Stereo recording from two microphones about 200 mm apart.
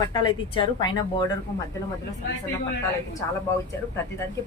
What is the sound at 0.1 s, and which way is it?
Speech, 25° left (ahead or behind).